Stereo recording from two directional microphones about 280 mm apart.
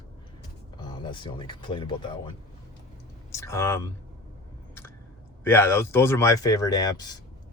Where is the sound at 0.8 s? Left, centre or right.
Centre.